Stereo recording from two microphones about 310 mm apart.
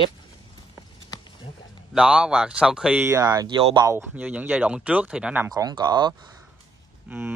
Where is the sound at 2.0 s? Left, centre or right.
Centre.